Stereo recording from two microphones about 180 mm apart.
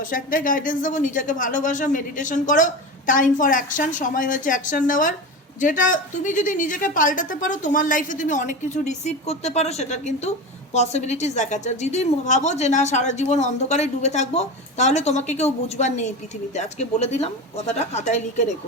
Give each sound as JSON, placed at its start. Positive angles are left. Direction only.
{"t": 0.0, "sound": "a woman's voice", "side_deg": 50}